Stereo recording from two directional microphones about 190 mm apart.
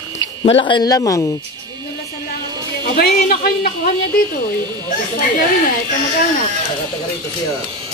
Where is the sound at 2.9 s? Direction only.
50° left (ahead or behind).